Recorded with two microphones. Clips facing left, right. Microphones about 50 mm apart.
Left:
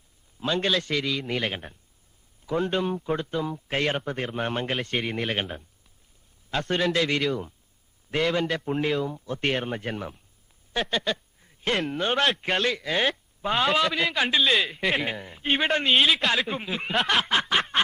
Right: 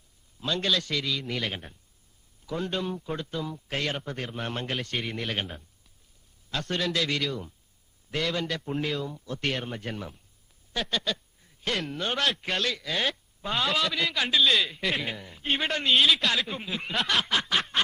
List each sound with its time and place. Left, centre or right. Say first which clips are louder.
0.3 s a man's voice: left 3 dB; left
15.9 s speech: right 1 dB; centre
17.2 s snicker: left 3 dB; left